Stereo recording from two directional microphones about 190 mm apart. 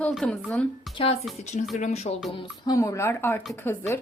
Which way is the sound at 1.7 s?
35° left (ahead or behind).